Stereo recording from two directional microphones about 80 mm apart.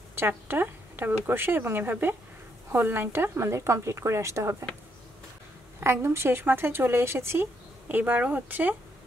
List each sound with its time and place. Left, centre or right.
0.1 s a woman's voice: right
5.8 s speech: right
7.9 s speech: right